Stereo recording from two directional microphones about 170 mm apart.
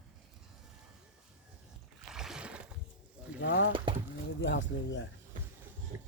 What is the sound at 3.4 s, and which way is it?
Speech, 90° left.